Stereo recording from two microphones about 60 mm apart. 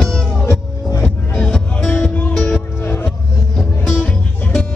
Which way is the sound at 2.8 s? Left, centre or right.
Left.